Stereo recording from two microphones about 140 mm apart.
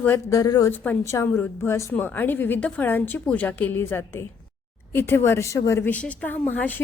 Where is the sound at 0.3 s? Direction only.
25° left (ahead or behind).